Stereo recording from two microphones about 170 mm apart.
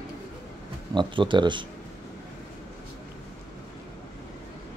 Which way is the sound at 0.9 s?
30° right (ahead or behind).